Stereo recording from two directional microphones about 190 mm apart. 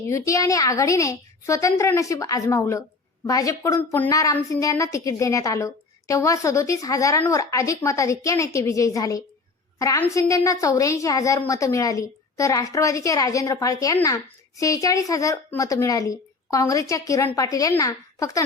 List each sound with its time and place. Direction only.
0.1 s a woman's voice: 15° left (ahead or behind)